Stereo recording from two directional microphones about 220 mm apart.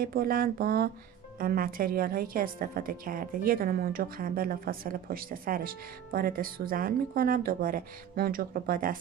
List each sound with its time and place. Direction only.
0.0 s a woman's voice: 40° right (ahead or behind)